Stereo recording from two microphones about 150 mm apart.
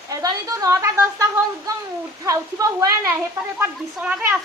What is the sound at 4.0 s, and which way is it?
Speech, 5° right (ahead or behind).